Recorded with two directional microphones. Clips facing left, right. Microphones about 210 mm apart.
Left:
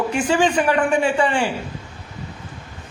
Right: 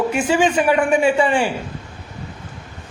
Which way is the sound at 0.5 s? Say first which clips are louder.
Right 2 dB; 20° right (ahead or behind).